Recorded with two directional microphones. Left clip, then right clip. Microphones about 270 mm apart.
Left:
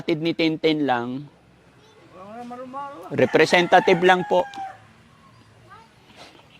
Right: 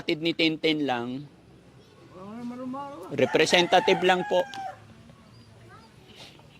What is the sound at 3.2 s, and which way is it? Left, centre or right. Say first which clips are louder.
Speech: left 4 dB; left.